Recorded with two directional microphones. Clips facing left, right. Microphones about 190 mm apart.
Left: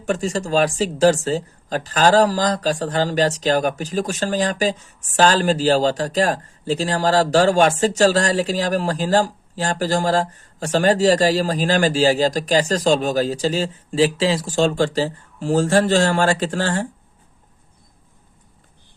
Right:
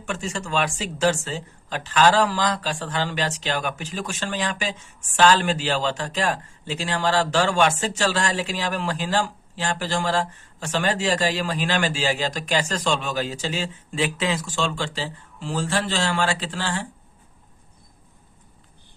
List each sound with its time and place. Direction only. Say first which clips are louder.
0.0 s speech: left 8 dB; 40° left (ahead or behind)